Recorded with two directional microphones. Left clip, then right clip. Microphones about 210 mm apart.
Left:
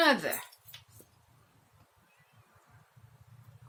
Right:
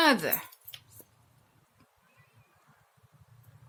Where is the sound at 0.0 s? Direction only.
50° right (ahead or behind).